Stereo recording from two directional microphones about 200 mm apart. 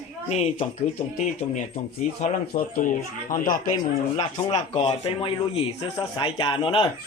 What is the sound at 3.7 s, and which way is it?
Speech, 20° left (ahead or behind).